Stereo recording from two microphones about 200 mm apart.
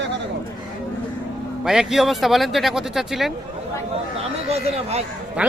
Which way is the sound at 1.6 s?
Centre (ahead or behind).